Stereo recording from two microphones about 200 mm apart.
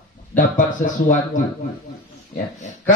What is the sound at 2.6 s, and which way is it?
Speech, 35° left (ahead or behind).